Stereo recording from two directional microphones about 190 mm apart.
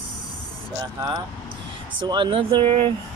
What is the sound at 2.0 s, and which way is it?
Speech, 25° right (ahead or behind).